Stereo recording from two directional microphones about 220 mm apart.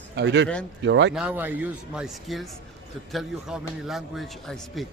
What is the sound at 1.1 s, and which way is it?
A man's voice, 5° right (ahead or behind).